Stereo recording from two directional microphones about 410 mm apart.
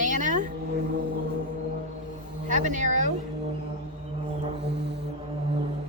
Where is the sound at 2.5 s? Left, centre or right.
Centre.